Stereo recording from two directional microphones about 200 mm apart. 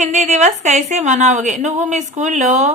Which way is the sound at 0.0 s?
35° right (ahead or behind).